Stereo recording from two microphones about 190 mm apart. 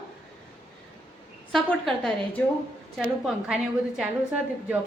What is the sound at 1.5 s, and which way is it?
A woman's voice, 5° left (ahead or behind).